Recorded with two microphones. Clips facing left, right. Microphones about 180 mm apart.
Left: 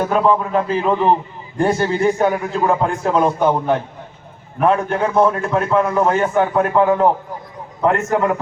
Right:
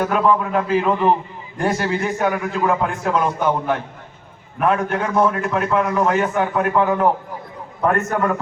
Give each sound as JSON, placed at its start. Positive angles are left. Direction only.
{"t": 0.0, "sound": "a man's voice", "side_deg": 30}